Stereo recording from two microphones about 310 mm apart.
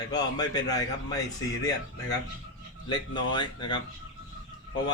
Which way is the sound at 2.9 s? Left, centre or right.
Centre.